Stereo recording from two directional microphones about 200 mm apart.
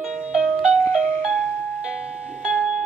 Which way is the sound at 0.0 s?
5° right (ahead or behind).